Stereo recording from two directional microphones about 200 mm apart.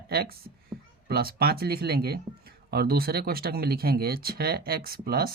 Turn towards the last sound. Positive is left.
turn(degrees=-50)  # may be behind; listen again after turning